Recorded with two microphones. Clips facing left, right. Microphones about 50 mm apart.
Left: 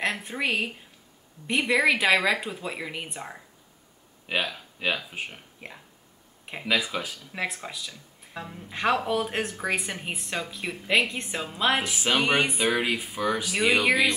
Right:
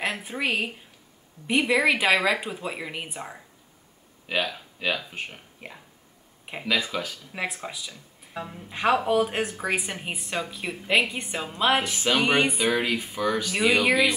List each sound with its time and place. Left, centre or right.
0.0 s speech: centre